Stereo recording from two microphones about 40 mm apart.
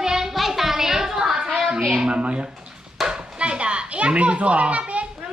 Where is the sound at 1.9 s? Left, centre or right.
Right.